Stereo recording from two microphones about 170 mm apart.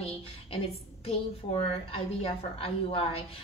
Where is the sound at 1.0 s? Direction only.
35° left (ahead or behind).